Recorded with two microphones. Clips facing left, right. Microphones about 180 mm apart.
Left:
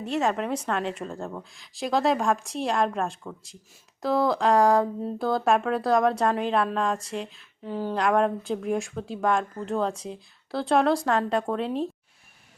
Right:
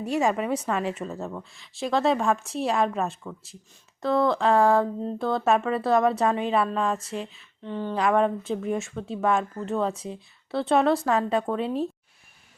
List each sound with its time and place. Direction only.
0.0 s speech: 10° right (ahead or behind)